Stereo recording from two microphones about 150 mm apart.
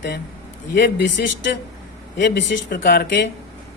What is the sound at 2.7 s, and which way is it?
Speech, 70° left (ahead or behind).